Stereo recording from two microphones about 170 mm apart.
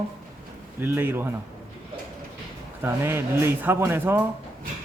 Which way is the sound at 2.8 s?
15° right (ahead or behind).